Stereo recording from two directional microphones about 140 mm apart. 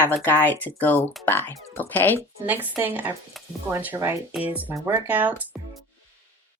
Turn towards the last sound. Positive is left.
turn(degrees=-10)  # may be behind; listen again after turning